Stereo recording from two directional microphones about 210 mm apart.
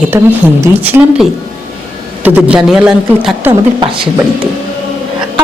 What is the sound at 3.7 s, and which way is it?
Speech, 25° right (ahead or behind).